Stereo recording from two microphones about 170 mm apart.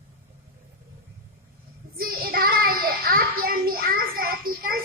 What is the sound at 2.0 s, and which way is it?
Child singing, 60° right (ahead or behind).